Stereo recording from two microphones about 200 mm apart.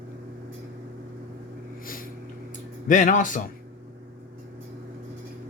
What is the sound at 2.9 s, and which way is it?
Speech, 40° left (ahead or behind).